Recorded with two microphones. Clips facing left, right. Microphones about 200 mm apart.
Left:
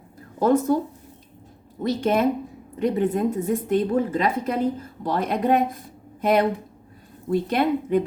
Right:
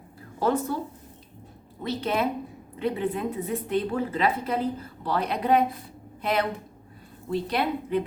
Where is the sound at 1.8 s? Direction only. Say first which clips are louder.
Left 6 dB; 45° left (ahead or behind).